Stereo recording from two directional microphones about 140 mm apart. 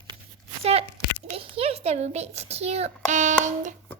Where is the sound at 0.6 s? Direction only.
45° right (ahead or behind).